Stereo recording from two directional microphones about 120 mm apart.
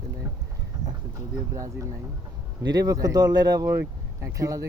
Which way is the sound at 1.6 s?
25° right (ahead or behind).